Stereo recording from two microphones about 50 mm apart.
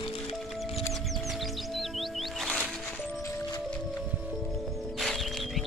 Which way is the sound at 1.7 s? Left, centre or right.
Centre.